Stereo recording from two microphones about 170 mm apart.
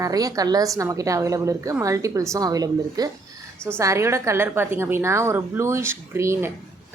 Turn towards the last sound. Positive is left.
turn(degrees=-15)  # may be behind; listen again after turning